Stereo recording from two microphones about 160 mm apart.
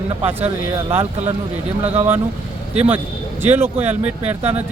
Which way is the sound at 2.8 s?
10° right (ahead or behind).